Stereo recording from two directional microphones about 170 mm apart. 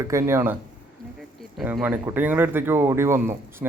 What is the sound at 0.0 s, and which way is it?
Speech, 15° right (ahead or behind).